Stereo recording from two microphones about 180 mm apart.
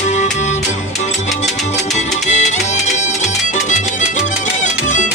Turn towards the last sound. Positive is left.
turn(degrees=45)  # may be behind; listen again after turning